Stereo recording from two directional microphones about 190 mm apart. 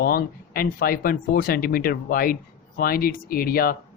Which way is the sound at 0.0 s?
55° left (ahead or behind).